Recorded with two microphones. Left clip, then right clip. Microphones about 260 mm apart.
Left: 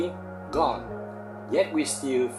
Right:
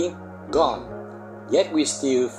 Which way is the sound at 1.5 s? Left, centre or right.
Right.